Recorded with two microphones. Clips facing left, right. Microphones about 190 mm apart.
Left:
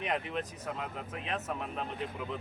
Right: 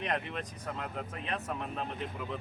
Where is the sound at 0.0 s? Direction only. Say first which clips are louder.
Left 1 dB; 5° left (ahead or behind).